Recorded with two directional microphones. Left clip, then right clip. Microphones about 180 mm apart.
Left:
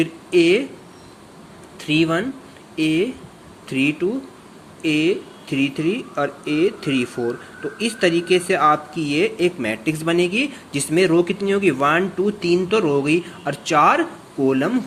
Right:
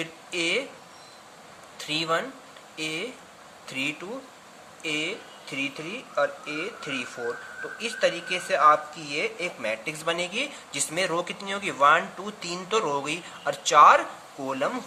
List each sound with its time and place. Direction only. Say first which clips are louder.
0.0 s speech: left 12 dB; 10° left (ahead or behind)
1.8 s speech: left 7 dB; 10° left (ahead or behind)